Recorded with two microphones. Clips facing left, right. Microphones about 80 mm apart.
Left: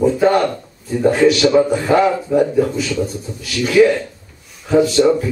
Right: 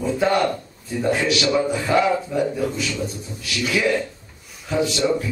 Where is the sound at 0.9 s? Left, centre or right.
Left.